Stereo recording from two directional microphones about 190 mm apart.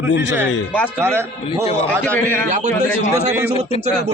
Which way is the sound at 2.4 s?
40° right (ahead or behind).